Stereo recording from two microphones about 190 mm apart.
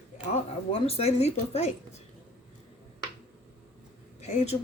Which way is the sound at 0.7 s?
30° left (ahead or behind).